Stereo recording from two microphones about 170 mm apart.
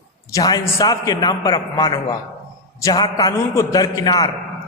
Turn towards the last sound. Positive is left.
turn(degrees=20)  # may be behind; listen again after turning